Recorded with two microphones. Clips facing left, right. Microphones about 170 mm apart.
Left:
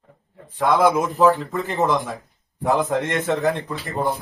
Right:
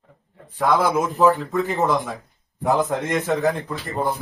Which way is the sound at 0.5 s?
Centre (ahead or behind).